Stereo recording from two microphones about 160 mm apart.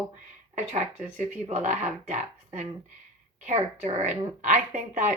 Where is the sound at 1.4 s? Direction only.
45° right (ahead or behind).